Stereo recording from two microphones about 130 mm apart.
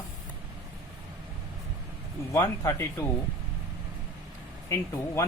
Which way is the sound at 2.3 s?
25° left (ahead or behind).